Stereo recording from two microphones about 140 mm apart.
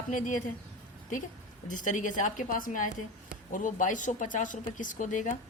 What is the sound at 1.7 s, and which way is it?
Speech, 65° left (ahead or behind).